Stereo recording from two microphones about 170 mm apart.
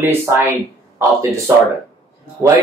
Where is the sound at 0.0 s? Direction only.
15° right (ahead or behind).